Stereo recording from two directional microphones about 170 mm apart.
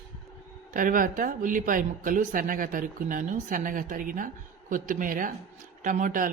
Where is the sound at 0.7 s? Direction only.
50° right (ahead or behind).